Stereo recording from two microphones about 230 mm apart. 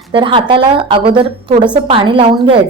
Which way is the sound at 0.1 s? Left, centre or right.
Right.